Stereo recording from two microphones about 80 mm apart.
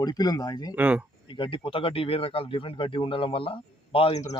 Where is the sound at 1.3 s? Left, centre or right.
Left.